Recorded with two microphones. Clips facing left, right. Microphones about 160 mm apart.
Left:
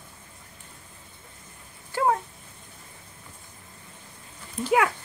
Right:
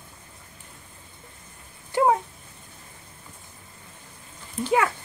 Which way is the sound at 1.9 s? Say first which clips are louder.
Right 4 dB; 15° right (ahead or behind).